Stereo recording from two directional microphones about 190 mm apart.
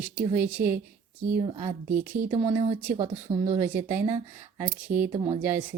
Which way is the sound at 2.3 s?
30° right (ahead or behind).